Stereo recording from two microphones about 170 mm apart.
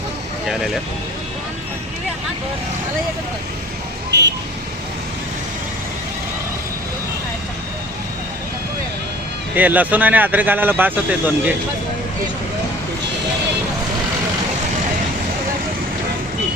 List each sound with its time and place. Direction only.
0.4 s speech: centre (ahead or behind)
4.1 s speech: 90° right
9.6 s speech: 10° right (ahead or behind)